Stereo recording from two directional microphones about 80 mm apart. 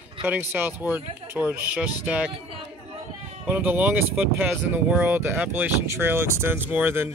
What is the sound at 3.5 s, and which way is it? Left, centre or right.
Speech, right.